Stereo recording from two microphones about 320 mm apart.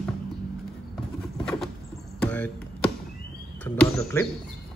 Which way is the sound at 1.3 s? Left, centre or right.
Centre.